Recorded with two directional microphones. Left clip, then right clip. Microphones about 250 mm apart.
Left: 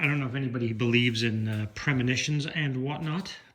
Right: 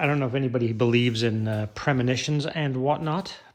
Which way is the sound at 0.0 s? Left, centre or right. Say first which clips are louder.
Right 4 dB; centre.